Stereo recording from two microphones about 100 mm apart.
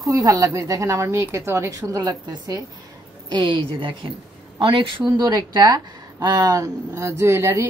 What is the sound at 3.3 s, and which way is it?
A woman's voice, 50° right (ahead or behind).